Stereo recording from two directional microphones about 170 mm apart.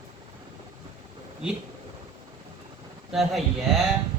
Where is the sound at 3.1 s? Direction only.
Centre (ahead or behind).